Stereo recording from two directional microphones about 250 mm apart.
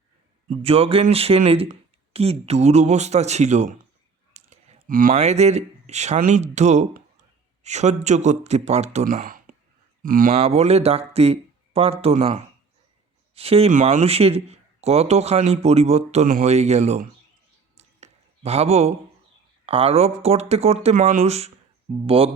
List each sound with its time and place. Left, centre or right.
0.6 s a man's voice: right
4.4 s clicking: right
4.9 s a man's voice: right
17.7 s a sound: right
19.6 s a man's voice: right